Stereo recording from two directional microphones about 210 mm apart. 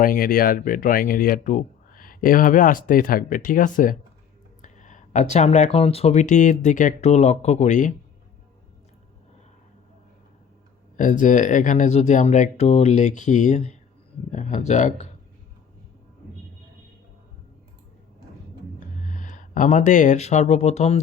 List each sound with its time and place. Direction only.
0.0 s speech: 45° left (ahead or behind)
10.9 s speech: 35° left (ahead or behind)
19.0 s speech: 35° left (ahead or behind)